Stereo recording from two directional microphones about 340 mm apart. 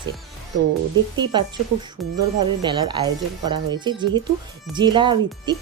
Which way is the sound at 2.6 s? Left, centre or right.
Centre.